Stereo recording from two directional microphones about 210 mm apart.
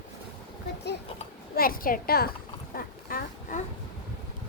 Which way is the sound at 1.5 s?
45° left (ahead or behind).